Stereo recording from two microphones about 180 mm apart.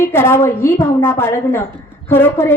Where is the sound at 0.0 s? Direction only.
15° left (ahead or behind).